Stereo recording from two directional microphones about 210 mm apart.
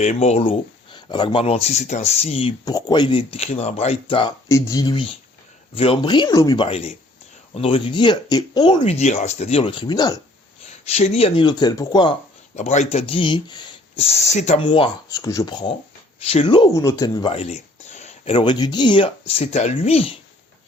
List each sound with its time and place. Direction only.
0.0 s speech: 30° left (ahead or behind)
8.8 s speech: 30° left (ahead or behind)
10.7 s speech: 30° left (ahead or behind)
12.5 s speech: 35° left (ahead or behind)
14.7 s speech: 20° left (ahead or behind)